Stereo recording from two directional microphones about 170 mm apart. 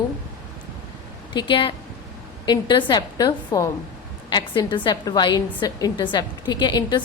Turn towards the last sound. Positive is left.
turn(degrees=25)  # may be behind; listen again after turning